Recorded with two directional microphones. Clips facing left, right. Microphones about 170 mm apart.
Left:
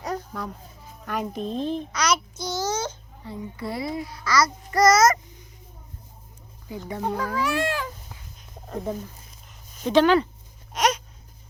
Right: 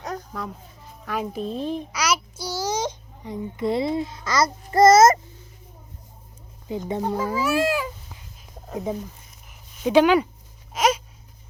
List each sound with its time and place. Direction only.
0.0 s a child's voice: centre (ahead or behind); by 5.2 s 30° right (ahead or behind)
6.7 s speech: 20° right (ahead or behind)
7.3 s speech: 5° right (ahead or behind)
10.8 s a sound: 5° right (ahead or behind)